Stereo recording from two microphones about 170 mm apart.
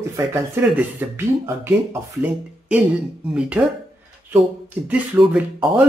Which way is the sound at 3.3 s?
5° right (ahead or behind).